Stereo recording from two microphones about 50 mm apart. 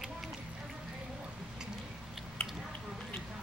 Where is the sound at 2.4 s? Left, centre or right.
Centre.